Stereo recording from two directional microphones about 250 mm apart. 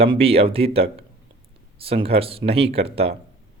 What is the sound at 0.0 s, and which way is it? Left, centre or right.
Speech, right.